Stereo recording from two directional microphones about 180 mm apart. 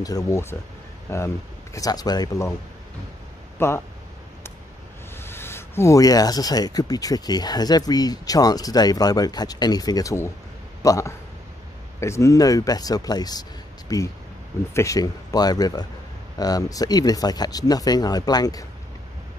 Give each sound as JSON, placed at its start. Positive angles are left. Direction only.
{"t": 0.0, "sound": "speech", "side_deg": 20}
{"t": 3.5, "sound": "speech", "side_deg": 15}
{"t": 5.1, "sound": "speech", "side_deg": 15}